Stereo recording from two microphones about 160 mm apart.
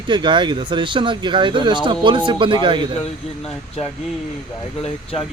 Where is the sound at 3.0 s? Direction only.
40° left (ahead or behind).